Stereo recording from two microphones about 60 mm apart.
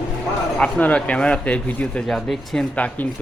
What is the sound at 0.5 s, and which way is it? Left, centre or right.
Speech, left.